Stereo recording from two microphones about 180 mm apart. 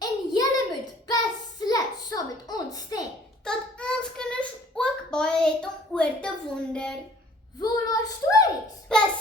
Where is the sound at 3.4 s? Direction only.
5° left (ahead or behind).